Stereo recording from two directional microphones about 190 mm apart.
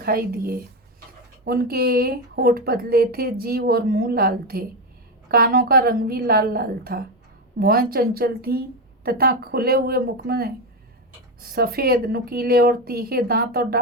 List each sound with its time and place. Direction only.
0.0 s speech: 50° right (ahead or behind)